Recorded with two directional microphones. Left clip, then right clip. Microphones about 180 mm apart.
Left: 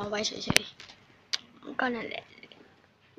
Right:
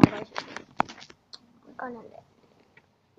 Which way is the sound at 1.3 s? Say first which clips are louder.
Left 14 dB; 30° left (ahead or behind).